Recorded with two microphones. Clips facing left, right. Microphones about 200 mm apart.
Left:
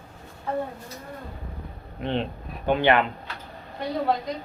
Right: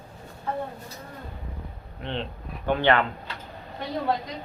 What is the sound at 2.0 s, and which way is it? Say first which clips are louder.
Speech: left 5 dB; 15° left (ahead or behind).